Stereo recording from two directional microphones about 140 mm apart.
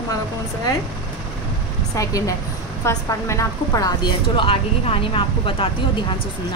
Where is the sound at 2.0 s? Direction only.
25° left (ahead or behind); by 5.7 s 40° left (ahead or behind).